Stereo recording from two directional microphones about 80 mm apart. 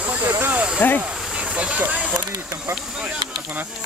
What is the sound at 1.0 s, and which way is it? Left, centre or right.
Speech, centre.